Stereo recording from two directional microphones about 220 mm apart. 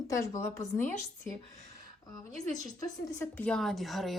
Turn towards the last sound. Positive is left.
turn(degrees=0)  # may be behind; listen again after turning